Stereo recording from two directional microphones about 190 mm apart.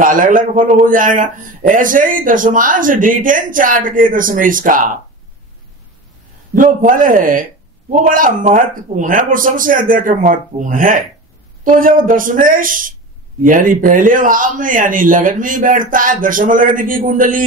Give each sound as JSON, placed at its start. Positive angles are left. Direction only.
{"t": 0.0, "sound": "a man's voice", "side_deg": -45}
{"t": 6.5, "sound": "a man's voice", "side_deg": -45}